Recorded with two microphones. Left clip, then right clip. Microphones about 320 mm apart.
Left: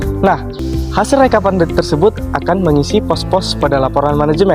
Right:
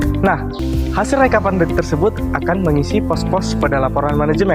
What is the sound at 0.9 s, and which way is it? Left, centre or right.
Speech, left.